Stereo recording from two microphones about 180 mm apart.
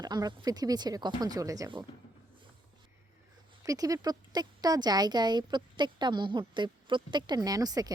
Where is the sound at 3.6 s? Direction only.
20° right (ahead or behind).